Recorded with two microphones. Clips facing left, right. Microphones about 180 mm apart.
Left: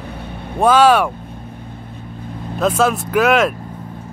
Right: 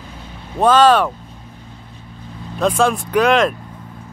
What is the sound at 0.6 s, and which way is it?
Speech, 10° left (ahead or behind).